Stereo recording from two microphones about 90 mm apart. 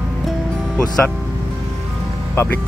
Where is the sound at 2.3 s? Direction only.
30° left (ahead or behind).